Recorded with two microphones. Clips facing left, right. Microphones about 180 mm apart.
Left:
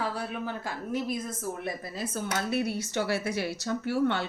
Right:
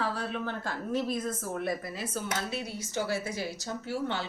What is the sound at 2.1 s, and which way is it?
A woman's voice, 55° left (ahead or behind).